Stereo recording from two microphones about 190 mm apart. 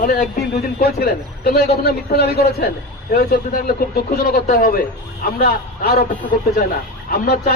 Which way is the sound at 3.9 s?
55° left (ahead or behind).